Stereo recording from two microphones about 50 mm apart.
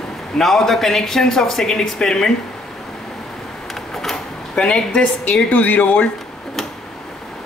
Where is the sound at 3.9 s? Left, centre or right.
Centre.